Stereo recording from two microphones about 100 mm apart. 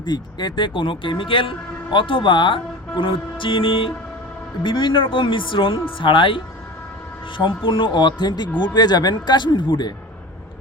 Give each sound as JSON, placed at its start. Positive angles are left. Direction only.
{"t": 0.0, "sound": "speech", "side_deg": 45}